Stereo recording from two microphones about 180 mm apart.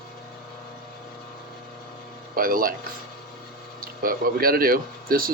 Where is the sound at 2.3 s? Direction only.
50° right (ahead or behind).